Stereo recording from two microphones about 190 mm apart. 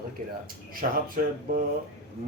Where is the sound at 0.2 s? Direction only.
45° right (ahead or behind).